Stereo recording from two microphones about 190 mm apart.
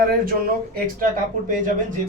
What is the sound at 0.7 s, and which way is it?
Speech, 50° right (ahead or behind).